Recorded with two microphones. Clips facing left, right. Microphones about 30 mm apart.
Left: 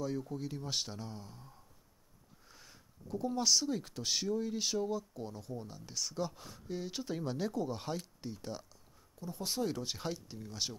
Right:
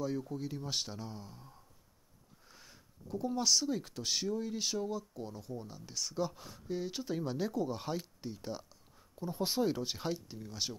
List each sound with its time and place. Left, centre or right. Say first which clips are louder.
0.0 s speech: right 1 dB; centre
9.1 s speech: right 4 dB; right; by 10.8 s centre